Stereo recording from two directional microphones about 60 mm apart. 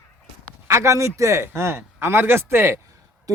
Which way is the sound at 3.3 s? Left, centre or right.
Right.